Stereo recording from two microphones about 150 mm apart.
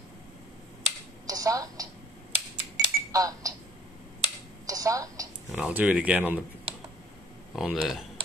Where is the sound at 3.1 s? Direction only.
25° right (ahead or behind).